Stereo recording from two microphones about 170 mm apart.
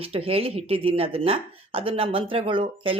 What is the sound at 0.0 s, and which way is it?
Speech, 35° right (ahead or behind).